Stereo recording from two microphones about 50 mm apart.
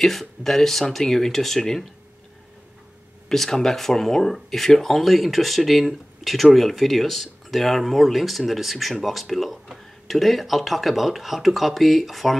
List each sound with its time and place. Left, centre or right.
0.0 s speech: centre
3.3 s speech: centre